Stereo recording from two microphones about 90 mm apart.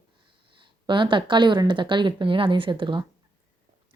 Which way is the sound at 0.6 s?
65° right (ahead or behind).